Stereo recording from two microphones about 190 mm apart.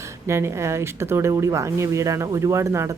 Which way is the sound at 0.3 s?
15° right (ahead or behind).